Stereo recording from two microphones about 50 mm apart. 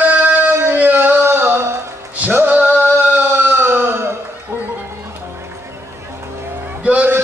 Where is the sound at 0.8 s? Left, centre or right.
Right.